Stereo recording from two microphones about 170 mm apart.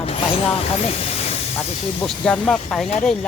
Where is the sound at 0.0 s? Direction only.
35° left (ahead or behind).